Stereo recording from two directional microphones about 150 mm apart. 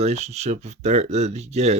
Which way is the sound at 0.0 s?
50° right (ahead or behind).